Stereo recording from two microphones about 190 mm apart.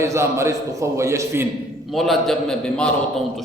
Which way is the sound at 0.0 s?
15° right (ahead or behind).